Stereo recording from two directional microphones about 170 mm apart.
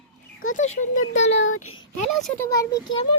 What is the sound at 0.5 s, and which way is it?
Child singing, 45° left (ahead or behind).